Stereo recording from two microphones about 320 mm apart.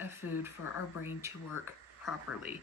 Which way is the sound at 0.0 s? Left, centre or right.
Centre.